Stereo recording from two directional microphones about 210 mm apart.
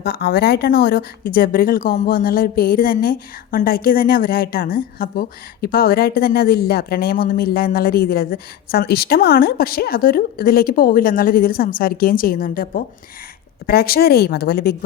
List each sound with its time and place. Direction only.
0.0 s speech: 50° left (ahead or behind)